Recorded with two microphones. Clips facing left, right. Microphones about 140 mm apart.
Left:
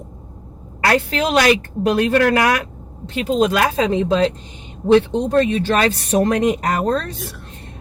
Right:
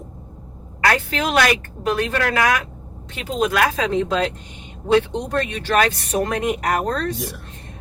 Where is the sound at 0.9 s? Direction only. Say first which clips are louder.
Left 3 dB; 35° left (ahead or behind).